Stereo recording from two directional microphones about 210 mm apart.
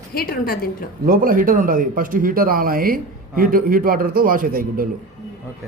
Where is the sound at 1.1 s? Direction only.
40° right (ahead or behind).